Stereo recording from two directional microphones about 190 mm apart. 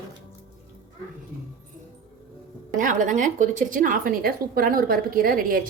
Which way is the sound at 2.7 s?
45° right (ahead or behind).